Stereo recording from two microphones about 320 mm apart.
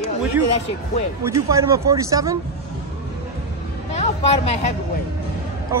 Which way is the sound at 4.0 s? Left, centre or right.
Centre.